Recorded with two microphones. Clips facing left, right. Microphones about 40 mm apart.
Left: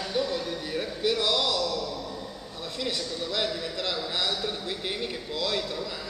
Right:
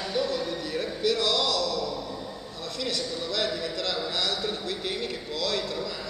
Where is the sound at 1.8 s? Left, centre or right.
Centre.